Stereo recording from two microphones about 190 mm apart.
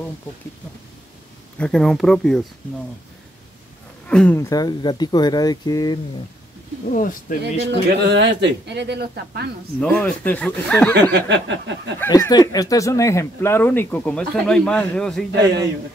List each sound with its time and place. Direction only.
1.6 s speech: centre (ahead or behind)
4.1 s speech: 5° left (ahead or behind)
4.4 s speech: 20° left (ahead or behind)
6.9 s speech: 45° left (ahead or behind)
7.6 s speech: 60° right (ahead or behind)
9.8 s speech: 5° left (ahead or behind)
11.1 s a sound: 70° right (ahead or behind)
12.0 s speech: 20° left (ahead or behind); by 15.2 s 5° left (ahead or behind)